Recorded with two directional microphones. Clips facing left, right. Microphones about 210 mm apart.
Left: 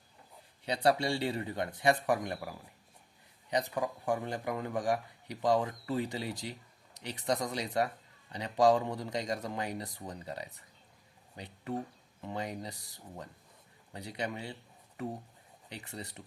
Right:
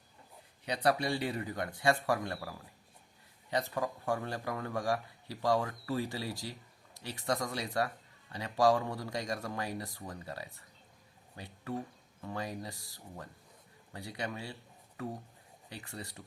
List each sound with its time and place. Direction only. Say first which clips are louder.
0.6 s a man's voice: left 2 dB; 25° left (ahead or behind)